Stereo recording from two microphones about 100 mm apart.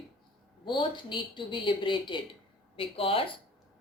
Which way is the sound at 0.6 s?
50° left (ahead or behind).